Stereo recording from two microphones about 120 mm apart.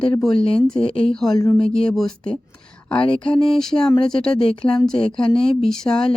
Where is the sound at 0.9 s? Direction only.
55° left (ahead or behind).